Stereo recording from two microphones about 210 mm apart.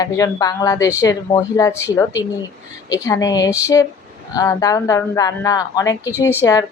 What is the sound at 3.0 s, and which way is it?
A woman's voice, 15° left (ahead or behind).